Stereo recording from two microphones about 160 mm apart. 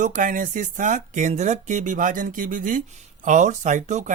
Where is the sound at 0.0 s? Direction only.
55° right (ahead or behind).